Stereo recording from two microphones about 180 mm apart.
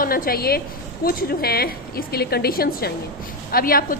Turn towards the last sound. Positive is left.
turn(degrees=55)  # may be behind; listen again after turning